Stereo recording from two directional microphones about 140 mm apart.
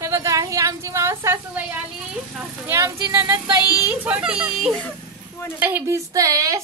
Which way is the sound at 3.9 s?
10° right (ahead or behind).